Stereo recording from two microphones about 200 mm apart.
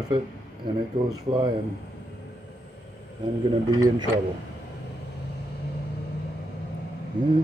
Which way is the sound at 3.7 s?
20° right (ahead or behind).